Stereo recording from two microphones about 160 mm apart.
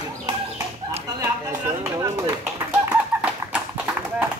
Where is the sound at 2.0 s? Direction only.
20° right (ahead or behind).